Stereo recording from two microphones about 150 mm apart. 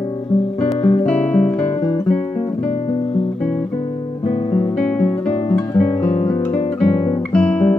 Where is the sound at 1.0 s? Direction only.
5° left (ahead or behind).